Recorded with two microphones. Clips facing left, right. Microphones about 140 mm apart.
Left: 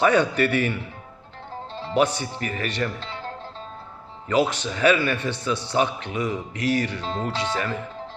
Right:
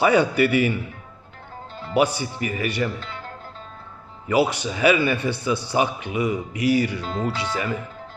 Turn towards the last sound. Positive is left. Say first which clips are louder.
# right 1 dB
turn(degrees=-10)  # may be behind; listen again after turning